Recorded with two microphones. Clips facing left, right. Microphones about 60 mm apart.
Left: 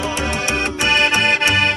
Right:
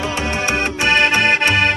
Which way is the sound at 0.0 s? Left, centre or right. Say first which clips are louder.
Right 1 dB; centre.